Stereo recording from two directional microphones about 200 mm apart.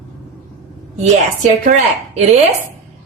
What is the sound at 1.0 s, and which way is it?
Speech, 35° right (ahead or behind).